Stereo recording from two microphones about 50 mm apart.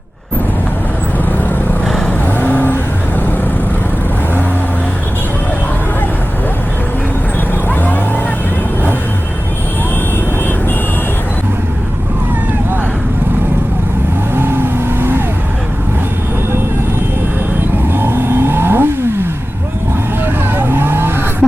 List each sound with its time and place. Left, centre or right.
1.8 s vehicle: centre
2.2 s vehicle: left
7.7 s vehicle: left
14.3 s vehicle: right
17.8 s vehicle: right
20.2 s vehicle: right